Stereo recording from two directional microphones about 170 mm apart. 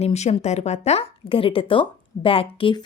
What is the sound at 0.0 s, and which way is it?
Speech, 40° left (ahead or behind).